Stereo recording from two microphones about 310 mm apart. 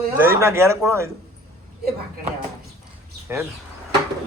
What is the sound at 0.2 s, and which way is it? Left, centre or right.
Speech, centre.